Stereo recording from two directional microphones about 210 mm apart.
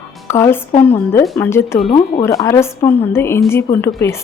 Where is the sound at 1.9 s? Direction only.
25° left (ahead or behind).